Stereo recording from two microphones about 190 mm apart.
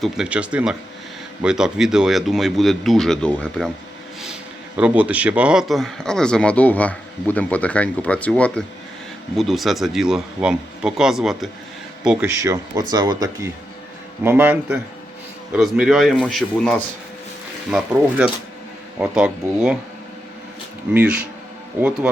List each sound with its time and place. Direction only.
0.0 s speech: 5° right (ahead or behind)
4.8 s speech: 5° right (ahead or behind)
12.4 s speech: 15° right (ahead or behind)
20.9 s speech: 5° right (ahead or behind)